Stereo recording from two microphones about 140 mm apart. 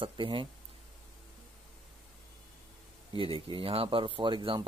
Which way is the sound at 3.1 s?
40° right (ahead or behind).